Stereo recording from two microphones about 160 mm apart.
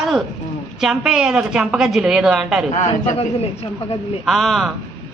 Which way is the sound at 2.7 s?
50° left (ahead or behind).